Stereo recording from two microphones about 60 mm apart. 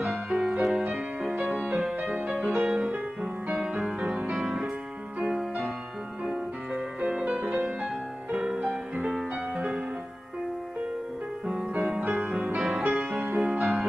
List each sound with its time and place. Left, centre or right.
0.0 s music: centre
6.7 s music: centre
12.1 s music: centre